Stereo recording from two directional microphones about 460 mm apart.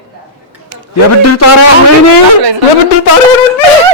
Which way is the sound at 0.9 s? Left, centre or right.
Left.